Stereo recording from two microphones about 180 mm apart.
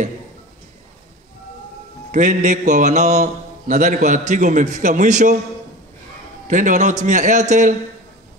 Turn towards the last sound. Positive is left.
turn(degrees=-40)  # may be behind; listen again after turning